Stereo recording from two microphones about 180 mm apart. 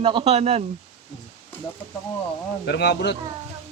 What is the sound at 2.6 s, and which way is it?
Speech, 70° left (ahead or behind).